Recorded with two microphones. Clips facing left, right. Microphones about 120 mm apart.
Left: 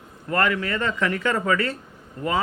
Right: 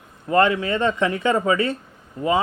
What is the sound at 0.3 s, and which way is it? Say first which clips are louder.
Speech: right 5 dB; 20° right (ahead or behind).